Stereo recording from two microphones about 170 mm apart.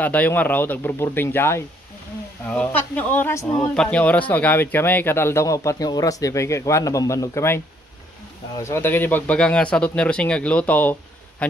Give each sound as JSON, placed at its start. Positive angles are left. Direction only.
{"t": 0.0, "sound": "speech", "side_deg": 10}